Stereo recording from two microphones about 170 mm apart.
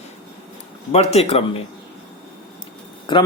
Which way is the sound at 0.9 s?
40° left (ahead or behind).